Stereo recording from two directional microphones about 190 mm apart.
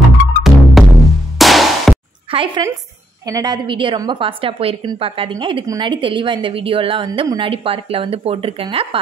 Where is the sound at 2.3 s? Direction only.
25° right (ahead or behind).